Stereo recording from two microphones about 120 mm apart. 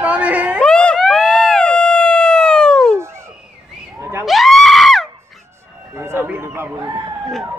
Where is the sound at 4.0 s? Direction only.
20° right (ahead or behind).